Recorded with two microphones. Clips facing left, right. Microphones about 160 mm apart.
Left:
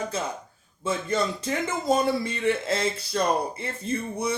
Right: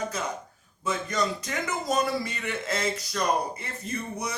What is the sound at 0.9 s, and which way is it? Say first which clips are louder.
A man's voice: left 2 dB; 30° left (ahead or behind).